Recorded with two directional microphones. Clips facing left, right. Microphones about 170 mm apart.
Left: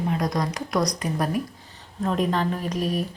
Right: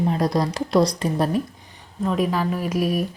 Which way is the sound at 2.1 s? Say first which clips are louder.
Right 1 dB; 5° right (ahead or behind).